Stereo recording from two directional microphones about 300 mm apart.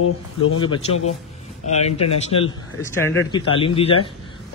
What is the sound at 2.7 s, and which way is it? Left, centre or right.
Speech, centre.